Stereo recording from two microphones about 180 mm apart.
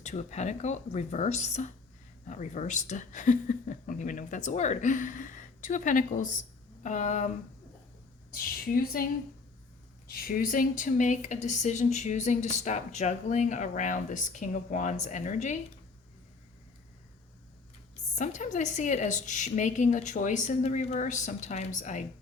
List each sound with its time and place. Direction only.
0.0 s a woman's voice: 40° left (ahead or behind)
8.3 s a woman's voice: 55° left (ahead or behind)
10.1 s speech: 55° left (ahead or behind)
18.1 s a woman's voice: 45° left (ahead or behind)